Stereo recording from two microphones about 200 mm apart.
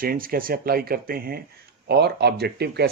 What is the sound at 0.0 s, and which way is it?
Speech, 45° right (ahead or behind).